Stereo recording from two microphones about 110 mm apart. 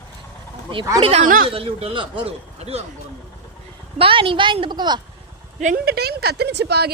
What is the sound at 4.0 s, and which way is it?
A woman's voice, 55° right (ahead or behind).